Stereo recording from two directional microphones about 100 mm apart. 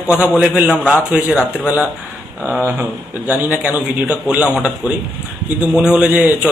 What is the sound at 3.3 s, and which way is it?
Speech, 15° right (ahead or behind).